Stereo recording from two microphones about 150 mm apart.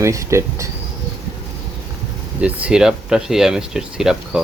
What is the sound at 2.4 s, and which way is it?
Speech, 10° right (ahead or behind).